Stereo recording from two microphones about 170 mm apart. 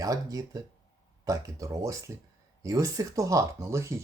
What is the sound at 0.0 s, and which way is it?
Speech, 20° right (ahead or behind).